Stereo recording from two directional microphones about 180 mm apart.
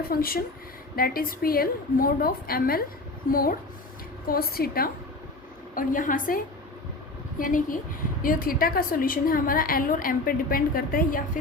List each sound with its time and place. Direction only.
0.1 s a woman's voice: 55° left (ahead or behind)